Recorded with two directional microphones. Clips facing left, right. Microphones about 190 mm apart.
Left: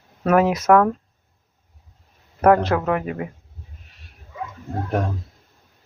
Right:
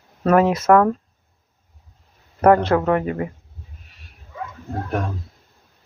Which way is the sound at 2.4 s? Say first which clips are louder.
Right 1 dB; centre (ahead or behind).